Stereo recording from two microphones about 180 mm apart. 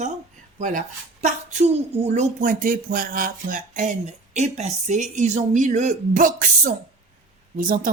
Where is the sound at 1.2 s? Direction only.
40° right (ahead or behind).